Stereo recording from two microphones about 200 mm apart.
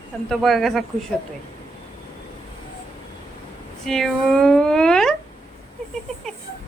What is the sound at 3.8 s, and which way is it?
Speech, centre (ahead or behind).